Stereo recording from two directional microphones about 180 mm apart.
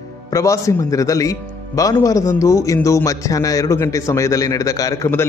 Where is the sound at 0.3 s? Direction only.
15° left (ahead or behind).